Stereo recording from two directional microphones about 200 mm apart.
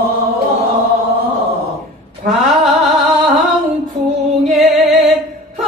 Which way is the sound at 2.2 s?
40° right (ahead or behind).